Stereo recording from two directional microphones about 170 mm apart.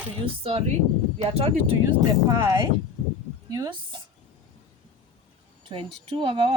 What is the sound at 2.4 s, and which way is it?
Speech, 20° right (ahead or behind).